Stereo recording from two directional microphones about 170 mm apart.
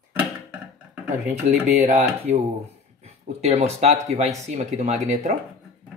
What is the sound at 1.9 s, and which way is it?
Speech, 40° right (ahead or behind).